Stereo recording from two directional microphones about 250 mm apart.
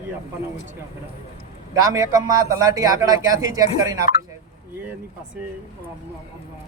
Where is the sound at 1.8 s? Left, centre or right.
Centre.